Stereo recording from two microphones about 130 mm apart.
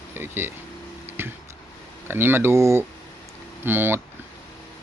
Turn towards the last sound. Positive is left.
turn(degrees=-15)  # may be behind; listen again after turning